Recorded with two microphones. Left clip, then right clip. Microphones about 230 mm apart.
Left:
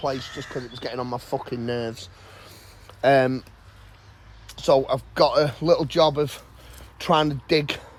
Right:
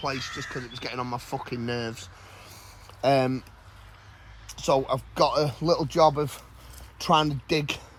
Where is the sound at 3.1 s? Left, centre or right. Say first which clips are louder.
Left 5 dB; centre.